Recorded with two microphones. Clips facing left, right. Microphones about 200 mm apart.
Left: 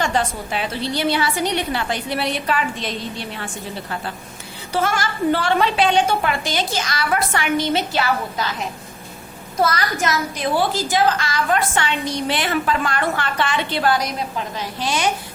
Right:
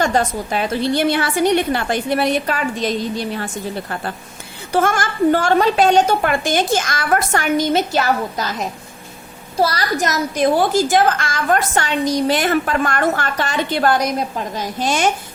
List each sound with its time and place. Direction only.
0.0 s a woman's voice: 45° right (ahead or behind)